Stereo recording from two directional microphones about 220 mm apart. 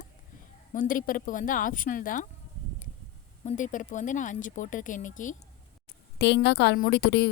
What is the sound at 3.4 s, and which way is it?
A woman's voice, 35° left (ahead or behind).